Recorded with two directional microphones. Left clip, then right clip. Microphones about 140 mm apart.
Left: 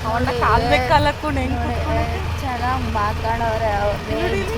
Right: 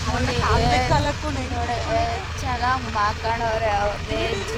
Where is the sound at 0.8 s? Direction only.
60° left (ahead or behind).